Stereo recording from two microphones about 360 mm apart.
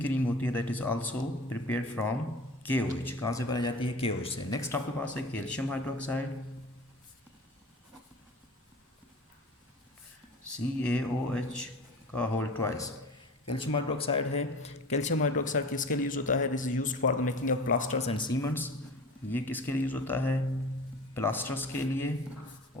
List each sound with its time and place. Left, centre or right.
0.0 s a man's voice: centre
10.8 s a man's voice: centre